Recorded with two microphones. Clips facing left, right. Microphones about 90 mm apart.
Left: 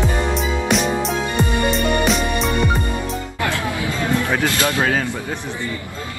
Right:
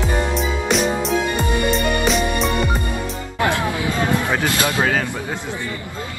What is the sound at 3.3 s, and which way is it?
Music, 20° right (ahead or behind).